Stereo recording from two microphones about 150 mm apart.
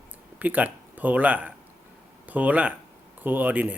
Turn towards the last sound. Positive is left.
turn(degrees=-10)  # may be behind; listen again after turning